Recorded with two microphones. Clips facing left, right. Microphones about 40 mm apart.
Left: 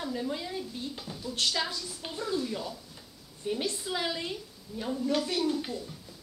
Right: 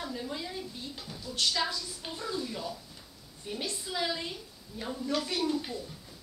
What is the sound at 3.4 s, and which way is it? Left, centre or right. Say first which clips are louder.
Speech: left 5 dB; centre.